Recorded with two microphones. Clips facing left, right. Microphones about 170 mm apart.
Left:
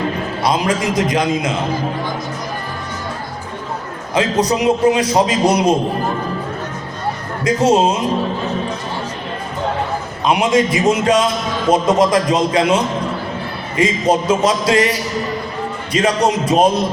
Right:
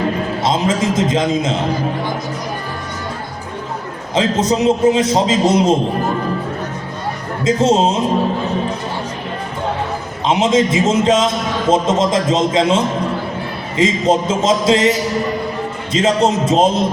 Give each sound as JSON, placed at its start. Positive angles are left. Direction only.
{"t": 0.4, "sound": "a man's voice", "side_deg": -25}
{"t": 4.1, "sound": "a man's voice", "side_deg": -25}
{"t": 7.4, "sound": "a man's voice", "side_deg": -25}
{"t": 10.2, "sound": "a man's voice", "side_deg": -25}